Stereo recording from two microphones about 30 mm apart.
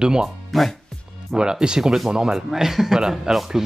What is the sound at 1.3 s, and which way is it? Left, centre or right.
Speech, right.